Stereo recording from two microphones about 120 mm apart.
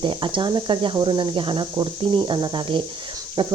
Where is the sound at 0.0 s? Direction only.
45° right (ahead or behind).